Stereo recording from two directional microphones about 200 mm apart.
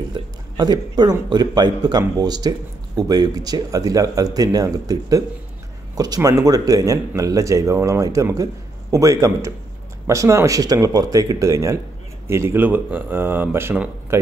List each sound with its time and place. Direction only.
0.1 s speech: 20° right (ahead or behind)